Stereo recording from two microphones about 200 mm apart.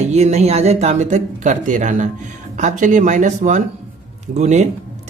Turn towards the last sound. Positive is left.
turn(degrees=-35)  # may be behind; listen again after turning